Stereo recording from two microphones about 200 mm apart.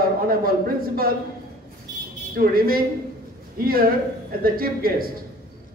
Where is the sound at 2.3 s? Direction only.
45° right (ahead or behind).